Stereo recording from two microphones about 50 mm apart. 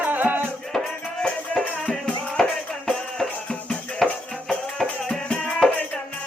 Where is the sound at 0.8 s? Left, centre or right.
Centre.